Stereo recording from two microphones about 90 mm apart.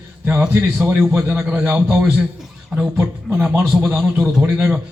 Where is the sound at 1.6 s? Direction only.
20° right (ahead or behind).